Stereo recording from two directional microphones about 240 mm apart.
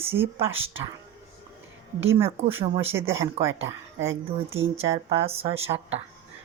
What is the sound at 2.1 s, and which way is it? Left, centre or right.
Speech, centre.